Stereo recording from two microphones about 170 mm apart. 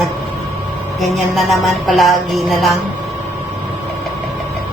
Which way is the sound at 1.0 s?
Centre (ahead or behind).